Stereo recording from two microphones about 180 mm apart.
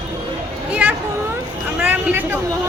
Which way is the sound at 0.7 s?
10° right (ahead or behind).